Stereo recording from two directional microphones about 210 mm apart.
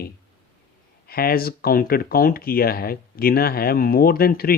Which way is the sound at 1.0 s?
45° left (ahead or behind).